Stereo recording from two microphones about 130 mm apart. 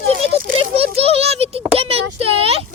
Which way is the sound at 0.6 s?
50° right (ahead or behind).